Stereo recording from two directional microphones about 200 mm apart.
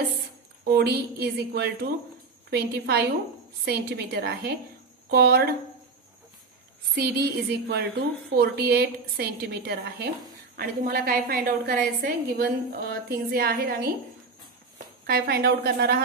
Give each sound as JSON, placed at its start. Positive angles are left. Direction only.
{"t": 0.7, "sound": "a woman's voice", "side_deg": -50}
{"t": 7.0, "sound": "a woman's voice", "side_deg": -55}
{"t": 15.0, "sound": "a woman's voice", "side_deg": -50}